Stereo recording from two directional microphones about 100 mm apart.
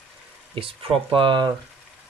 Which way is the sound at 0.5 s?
65° right (ahead or behind).